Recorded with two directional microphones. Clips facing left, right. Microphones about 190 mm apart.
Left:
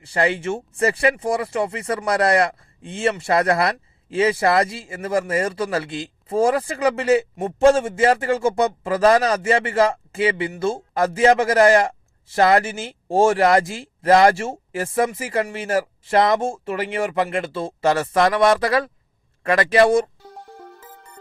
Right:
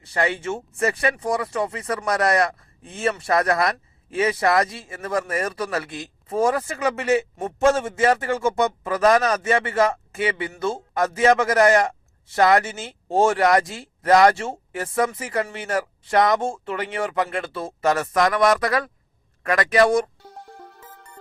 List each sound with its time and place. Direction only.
0.1 s speech: 30° left (ahead or behind)
20.6 s music: centre (ahead or behind)